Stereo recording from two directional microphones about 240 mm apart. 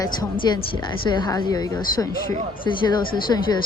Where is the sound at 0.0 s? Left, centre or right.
Centre.